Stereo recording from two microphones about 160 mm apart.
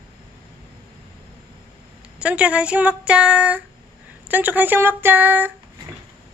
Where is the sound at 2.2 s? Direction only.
10° right (ahead or behind).